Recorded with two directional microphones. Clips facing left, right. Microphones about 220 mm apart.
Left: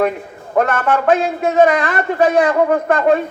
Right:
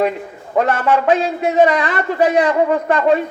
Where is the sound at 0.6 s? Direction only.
50° left (ahead or behind).